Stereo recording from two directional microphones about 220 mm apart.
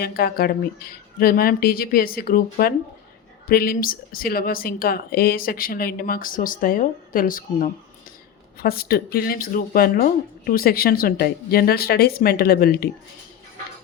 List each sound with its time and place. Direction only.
0.0 s speech: 45° left (ahead or behind)